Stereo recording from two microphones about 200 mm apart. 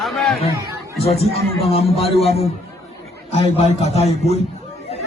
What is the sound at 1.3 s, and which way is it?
Speech, 30° left (ahead or behind).